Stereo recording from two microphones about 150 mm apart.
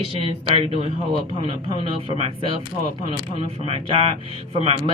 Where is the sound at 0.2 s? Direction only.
40° right (ahead or behind).